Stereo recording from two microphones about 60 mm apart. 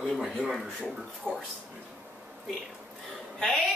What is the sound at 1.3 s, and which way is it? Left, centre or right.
Speech, right.